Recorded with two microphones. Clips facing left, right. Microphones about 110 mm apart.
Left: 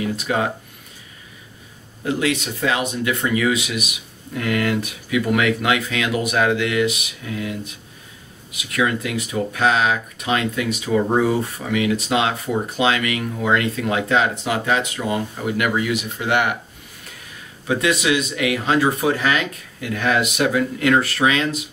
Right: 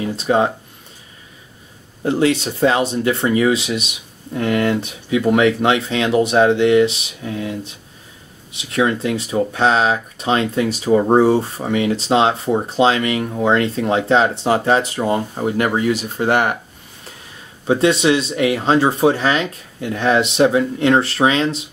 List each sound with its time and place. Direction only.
0.0 s speech: 30° right (ahead or behind)
2.0 s speech: 30° right (ahead or behind)
17.6 s speech: 30° right (ahead or behind)